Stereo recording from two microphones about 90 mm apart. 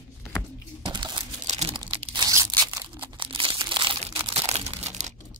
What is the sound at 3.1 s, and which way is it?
Crumpling, 70° right (ahead or behind).